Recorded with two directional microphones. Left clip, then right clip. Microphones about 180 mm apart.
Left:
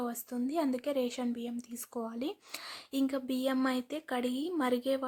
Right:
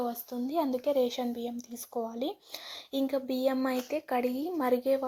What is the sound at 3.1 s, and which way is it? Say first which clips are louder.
A woman's voice: right 6 dB; 15° left (ahead or behind).